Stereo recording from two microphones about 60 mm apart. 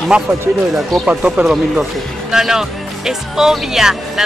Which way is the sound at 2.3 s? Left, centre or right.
Centre.